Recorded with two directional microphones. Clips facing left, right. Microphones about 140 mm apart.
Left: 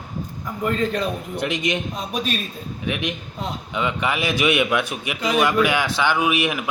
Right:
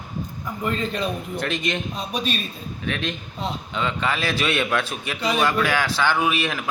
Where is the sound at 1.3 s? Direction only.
15° left (ahead or behind).